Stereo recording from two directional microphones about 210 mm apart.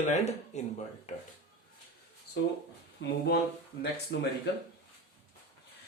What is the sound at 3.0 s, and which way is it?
Speech, 50° left (ahead or behind).